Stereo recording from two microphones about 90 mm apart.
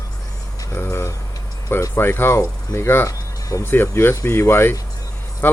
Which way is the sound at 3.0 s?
40° left (ahead or behind).